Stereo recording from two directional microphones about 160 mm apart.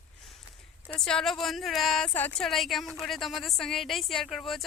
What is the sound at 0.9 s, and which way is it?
A woman's voice, 5° left (ahead or behind).